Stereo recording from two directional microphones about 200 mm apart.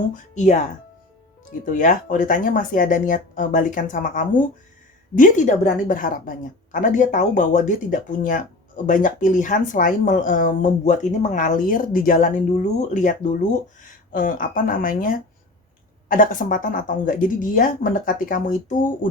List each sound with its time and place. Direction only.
0.1 s a woman's voice: 35° left (ahead or behind)